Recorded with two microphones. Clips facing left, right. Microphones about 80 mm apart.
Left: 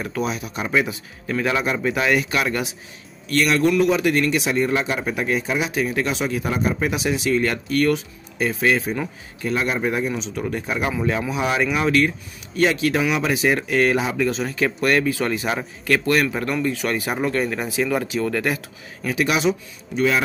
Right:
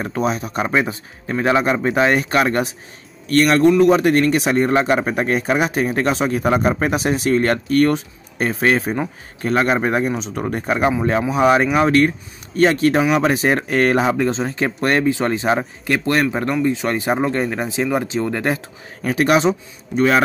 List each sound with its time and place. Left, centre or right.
0.0 s a man's voice: right
10.9 s speech: right
19.0 s speech: right